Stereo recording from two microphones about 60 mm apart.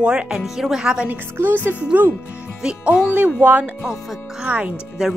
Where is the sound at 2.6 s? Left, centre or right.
Right.